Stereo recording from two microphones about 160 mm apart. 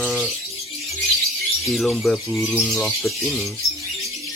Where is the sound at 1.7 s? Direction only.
Centre (ahead or behind).